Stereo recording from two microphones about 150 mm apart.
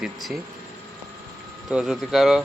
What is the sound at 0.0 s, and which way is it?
Speech, centre (ahead or behind).